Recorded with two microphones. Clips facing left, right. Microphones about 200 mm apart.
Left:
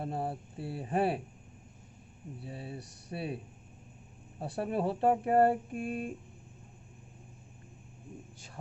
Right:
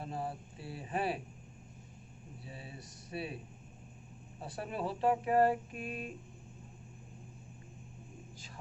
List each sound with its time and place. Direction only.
0.0 s a sound: 60° left (ahead or behind)
0.5 s speech: 60° left (ahead or behind)
2.4 s speech: 60° left (ahead or behind)
3.1 s speech: 45° left (ahead or behind)
4.4 s speech: 55° left (ahead or behind)